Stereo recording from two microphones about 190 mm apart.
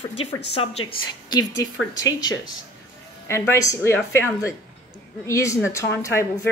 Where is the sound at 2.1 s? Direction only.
20° left (ahead or behind).